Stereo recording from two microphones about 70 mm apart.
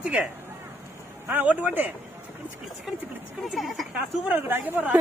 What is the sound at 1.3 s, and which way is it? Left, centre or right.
Speech, right.